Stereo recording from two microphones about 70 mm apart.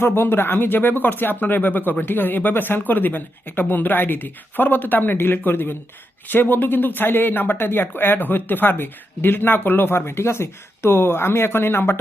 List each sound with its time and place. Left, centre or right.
0.0 s speech: left